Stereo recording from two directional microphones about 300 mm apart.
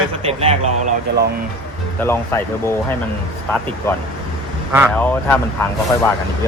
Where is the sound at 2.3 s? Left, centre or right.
Centre.